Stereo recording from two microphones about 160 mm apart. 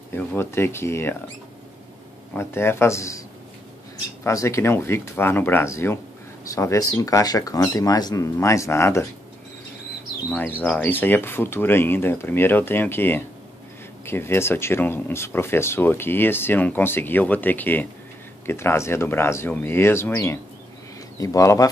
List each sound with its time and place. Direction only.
0.1 s speech: 10° left (ahead or behind)
2.3 s speech: 15° left (ahead or behind)
10.3 s speech: 10° left (ahead or behind)